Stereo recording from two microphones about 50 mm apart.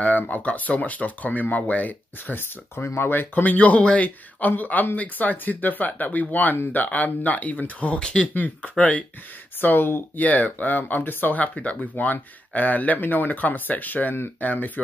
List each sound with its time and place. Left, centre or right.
0.0 s speech: left
2.7 s speech: left
8.0 s speech: centre
8.4 s speech: left
9.6 s speech: left
10.1 s speech: left